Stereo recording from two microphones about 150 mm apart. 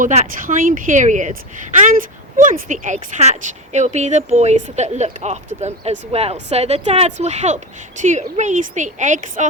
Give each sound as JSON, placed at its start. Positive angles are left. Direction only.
{"t": 0.0, "sound": "speech", "side_deg": -55}
{"t": 2.4, "sound": "speech", "side_deg": -60}